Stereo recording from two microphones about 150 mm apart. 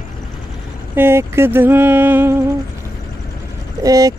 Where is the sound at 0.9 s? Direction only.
15° right (ahead or behind).